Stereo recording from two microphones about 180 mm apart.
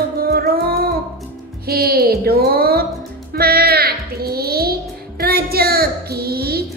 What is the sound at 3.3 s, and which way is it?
A child's voice, 60° right (ahead or behind).